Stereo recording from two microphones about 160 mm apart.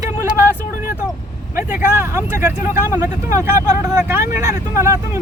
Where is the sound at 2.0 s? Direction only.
15° right (ahead or behind).